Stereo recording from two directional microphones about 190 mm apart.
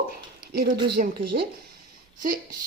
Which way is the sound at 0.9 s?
50° right (ahead or behind).